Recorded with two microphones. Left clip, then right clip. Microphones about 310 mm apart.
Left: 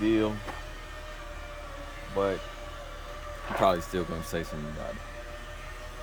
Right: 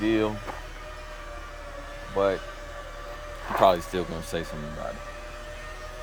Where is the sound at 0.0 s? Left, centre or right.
Centre.